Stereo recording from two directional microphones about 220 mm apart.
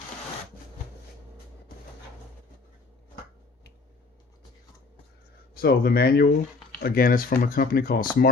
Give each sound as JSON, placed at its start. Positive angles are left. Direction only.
{"t": 5.5, "sound": "speech", "side_deg": 45}